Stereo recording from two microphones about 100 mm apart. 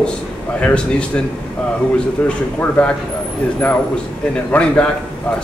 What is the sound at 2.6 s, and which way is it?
Speech, 15° left (ahead or behind).